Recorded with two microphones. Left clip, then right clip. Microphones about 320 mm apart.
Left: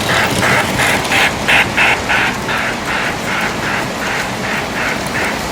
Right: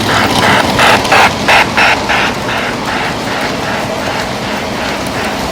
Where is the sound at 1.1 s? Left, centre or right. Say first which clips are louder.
Right 5 dB; right.